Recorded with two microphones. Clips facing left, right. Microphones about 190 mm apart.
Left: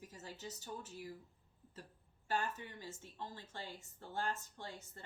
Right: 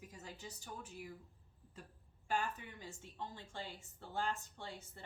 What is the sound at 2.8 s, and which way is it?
Speech, 15° right (ahead or behind).